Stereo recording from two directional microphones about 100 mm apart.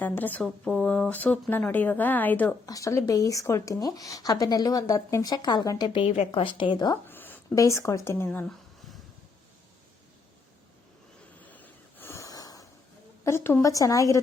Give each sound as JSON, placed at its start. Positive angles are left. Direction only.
{"t": 0.0, "sound": "speech", "side_deg": 15}
{"t": 2.6, "sound": "speech", "side_deg": 35}
{"t": 5.9, "sound": "a woman's voice", "side_deg": 75}
{"t": 6.9, "sound": "a sound", "side_deg": 20}
{"t": 7.5, "sound": "speech", "side_deg": 35}
{"t": 11.4, "sound": "a sound", "side_deg": 15}
{"t": 13.2, "sound": "speech", "side_deg": 25}